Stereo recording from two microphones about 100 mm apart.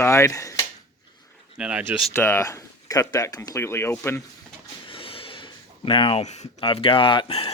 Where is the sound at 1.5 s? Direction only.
10° right (ahead or behind).